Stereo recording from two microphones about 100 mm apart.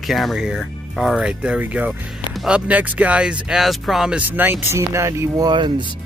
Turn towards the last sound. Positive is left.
turn(degrees=-55)  # may be behind; listen again after turning